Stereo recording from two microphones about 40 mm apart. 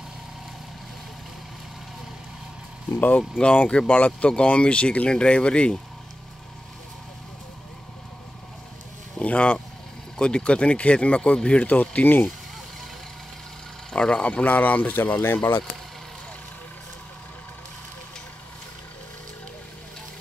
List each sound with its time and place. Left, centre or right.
3.2 s speech: left
3.8 s speech: left
4.3 s speech: left
9.2 s a sound: left
10.1 s speech: left
11.6 s speech: left
13.9 s speech: left
14.4 s speech: left
15.3 s speech: left